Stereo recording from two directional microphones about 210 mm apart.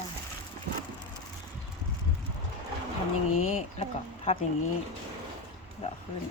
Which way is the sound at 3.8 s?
30° left (ahead or behind).